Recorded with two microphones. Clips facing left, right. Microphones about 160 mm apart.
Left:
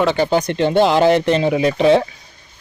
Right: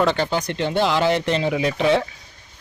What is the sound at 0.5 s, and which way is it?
Speech, 55° left (ahead or behind).